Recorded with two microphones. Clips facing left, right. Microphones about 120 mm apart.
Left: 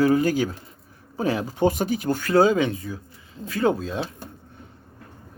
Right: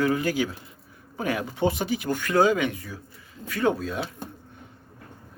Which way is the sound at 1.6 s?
45° left (ahead or behind).